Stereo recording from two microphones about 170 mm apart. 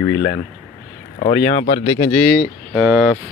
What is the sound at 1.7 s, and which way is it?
Speech, 20° left (ahead or behind).